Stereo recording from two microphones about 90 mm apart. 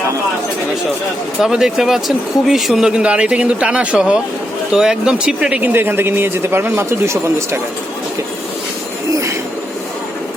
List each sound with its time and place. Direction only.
1.4 s speech: 5° right (ahead or behind); by 7.6 s 30° right (ahead or behind)